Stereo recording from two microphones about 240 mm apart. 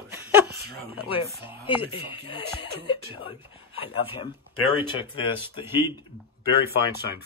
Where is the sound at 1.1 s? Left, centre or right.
Left.